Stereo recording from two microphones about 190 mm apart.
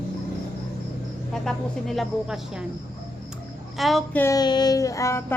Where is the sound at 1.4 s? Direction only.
Centre (ahead or behind).